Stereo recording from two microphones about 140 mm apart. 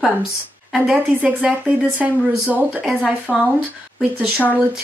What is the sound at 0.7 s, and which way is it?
A woman's voice, 5° right (ahead or behind).